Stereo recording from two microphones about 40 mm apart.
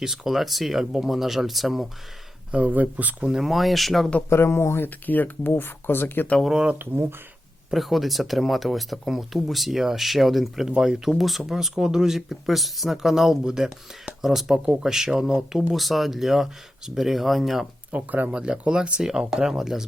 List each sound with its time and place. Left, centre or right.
0.0 s speech: centre
2.5 s speech: right
3.2 s speech: centre
4.3 s speech: left
5.0 s speech: left
5.5 s speech: left
6.7 s speech: right
7.7 s speech: centre
11.4 s speech: centre
13.4 s speech: centre
14.2 s speech: centre
17.9 s speech: right
18.3 s speech: right